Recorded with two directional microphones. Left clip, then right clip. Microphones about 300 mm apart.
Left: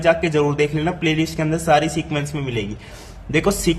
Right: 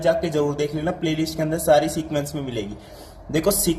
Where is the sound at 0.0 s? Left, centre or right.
Left.